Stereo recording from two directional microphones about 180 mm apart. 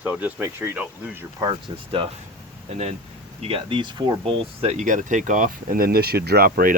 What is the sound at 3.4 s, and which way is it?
Speech, 30° right (ahead or behind).